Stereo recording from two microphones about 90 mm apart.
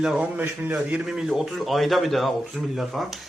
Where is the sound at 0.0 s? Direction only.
10° right (ahead or behind).